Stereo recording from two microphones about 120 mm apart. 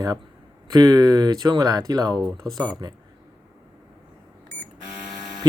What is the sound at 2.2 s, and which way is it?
Speech, centre (ahead or behind).